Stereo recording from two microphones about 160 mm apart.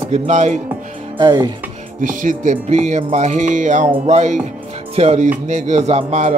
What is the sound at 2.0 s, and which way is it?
Music, 55° right (ahead or behind).